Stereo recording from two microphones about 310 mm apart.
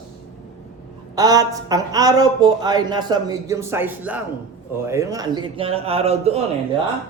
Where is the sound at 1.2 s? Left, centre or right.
Centre.